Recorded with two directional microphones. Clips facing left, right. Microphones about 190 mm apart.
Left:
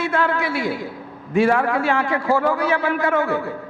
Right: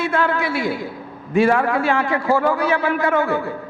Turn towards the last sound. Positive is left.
turn(degrees=-10)  # may be behind; listen again after turning